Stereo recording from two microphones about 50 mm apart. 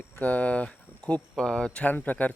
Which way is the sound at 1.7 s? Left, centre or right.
Left.